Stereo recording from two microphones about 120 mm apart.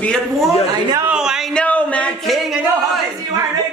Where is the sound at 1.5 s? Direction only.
10° left (ahead or behind).